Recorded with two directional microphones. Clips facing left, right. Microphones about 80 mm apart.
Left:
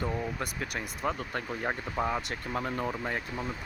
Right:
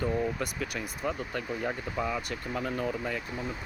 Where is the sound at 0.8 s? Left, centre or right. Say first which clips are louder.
Left 2 dB; left.